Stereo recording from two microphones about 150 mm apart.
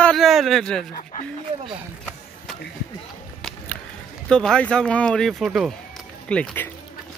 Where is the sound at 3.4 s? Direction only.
Centre (ahead or behind).